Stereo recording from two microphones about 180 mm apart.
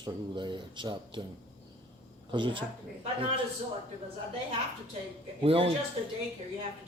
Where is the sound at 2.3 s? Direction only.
25° right (ahead or behind).